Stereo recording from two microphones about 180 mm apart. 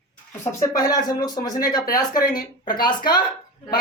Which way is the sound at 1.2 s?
20° left (ahead or behind).